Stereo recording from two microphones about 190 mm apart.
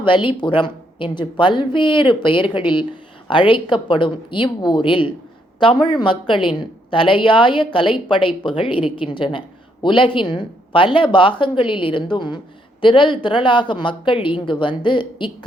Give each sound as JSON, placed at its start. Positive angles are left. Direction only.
{"t": 0.0, "sound": "a woman's voice", "side_deg": 25}